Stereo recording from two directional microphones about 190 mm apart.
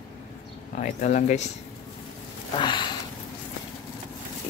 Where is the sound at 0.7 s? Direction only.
40° left (ahead or behind).